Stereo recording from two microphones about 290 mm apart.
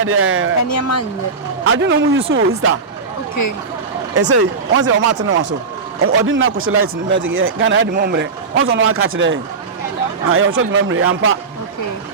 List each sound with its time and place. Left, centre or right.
0.0 s speech: right
0.7 s speech: left
1.6 s speech: right
4.1 s speech: right
6.0 s speech: right